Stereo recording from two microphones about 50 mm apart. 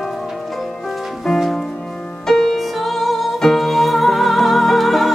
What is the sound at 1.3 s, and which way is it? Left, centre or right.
Music, centre.